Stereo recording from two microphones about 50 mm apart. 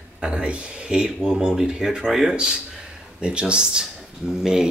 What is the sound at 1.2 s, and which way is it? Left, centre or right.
Speech, centre.